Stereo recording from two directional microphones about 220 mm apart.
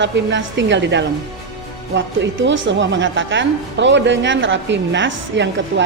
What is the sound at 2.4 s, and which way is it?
A woman's voice, 55° right (ahead or behind).